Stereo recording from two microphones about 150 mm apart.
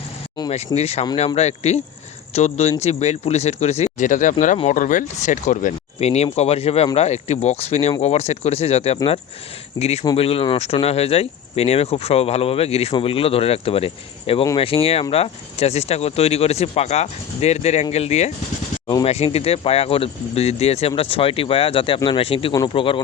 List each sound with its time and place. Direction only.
0.5 s speech: 45° left (ahead or behind)